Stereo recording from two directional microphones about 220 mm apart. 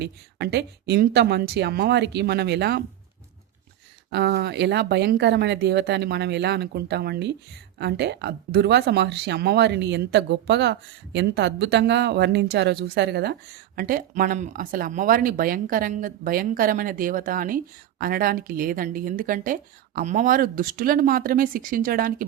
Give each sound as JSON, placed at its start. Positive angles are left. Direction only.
{"t": 0.0, "sound": "speech", "side_deg": -50}
{"t": 4.1, "sound": "speech", "side_deg": -50}